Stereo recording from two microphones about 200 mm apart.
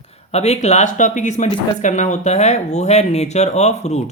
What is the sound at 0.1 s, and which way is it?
Speech, 30° left (ahead or behind).